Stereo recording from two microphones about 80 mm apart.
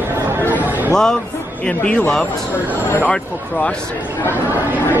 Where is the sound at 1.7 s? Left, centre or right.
Centre.